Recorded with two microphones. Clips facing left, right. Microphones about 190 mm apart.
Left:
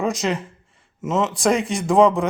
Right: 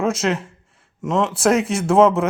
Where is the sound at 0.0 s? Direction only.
Centre (ahead or behind).